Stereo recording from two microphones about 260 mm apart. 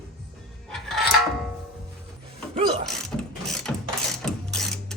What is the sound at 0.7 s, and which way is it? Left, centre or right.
Music, centre.